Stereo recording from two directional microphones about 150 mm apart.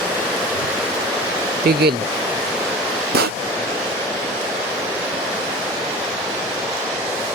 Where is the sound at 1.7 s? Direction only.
90° right.